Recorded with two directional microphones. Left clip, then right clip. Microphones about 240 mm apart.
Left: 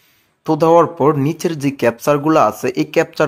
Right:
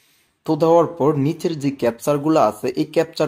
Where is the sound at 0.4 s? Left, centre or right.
Centre.